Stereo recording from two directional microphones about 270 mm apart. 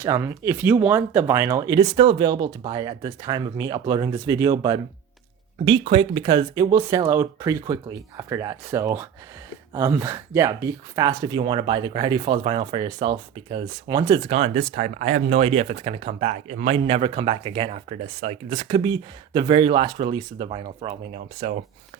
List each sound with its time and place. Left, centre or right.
0.0 s speech: centre